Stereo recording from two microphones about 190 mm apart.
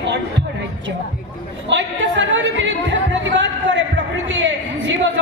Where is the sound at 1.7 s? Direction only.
80° right.